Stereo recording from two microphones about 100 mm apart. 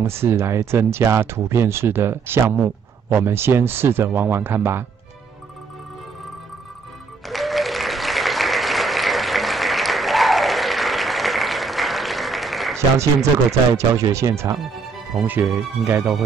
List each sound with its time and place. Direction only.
0.0 s speech: 25° right (ahead or behind)
7.2 s applause: centre (ahead or behind)
12.7 s speech: 30° right (ahead or behind)